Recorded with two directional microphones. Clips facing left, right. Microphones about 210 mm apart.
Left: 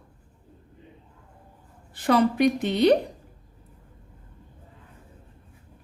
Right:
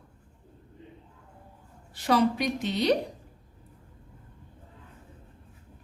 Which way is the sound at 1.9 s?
55° left (ahead or behind).